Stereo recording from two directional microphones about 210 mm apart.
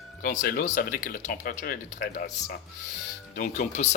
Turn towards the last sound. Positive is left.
turn(degrees=35)  # may be behind; listen again after turning